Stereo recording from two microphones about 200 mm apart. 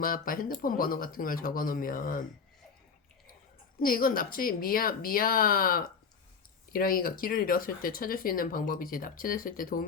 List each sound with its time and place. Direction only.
0.0 s speech: 45° left (ahead or behind)
3.8 s speech: 45° left (ahead or behind)